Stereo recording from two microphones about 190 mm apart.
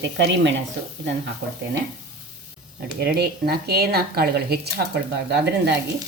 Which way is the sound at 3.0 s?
55° right (ahead or behind).